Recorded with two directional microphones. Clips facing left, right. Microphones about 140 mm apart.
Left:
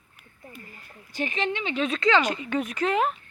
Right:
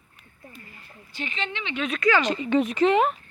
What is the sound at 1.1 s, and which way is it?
A woman's voice, 45° left (ahead or behind).